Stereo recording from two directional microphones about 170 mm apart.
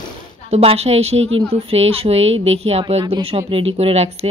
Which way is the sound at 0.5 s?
35° right (ahead or behind).